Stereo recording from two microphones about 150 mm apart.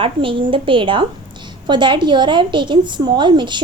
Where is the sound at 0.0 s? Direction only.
35° right (ahead or behind).